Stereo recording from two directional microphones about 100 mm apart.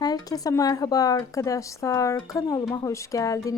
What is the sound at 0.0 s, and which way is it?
A woman's voice, 40° left (ahead or behind).